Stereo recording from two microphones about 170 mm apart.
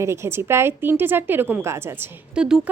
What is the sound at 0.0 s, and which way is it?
A woman's voice, 15° right (ahead or behind).